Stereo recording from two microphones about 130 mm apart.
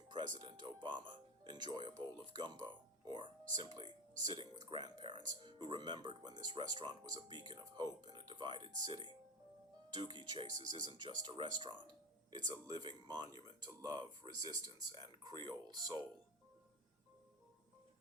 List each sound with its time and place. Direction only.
0.3 s music: 35° right (ahead or behind)
4.6 s speech: 35° right (ahead or behind)